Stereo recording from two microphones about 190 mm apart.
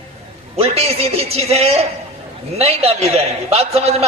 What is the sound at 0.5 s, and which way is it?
A man's voice, 30° right (ahead or behind).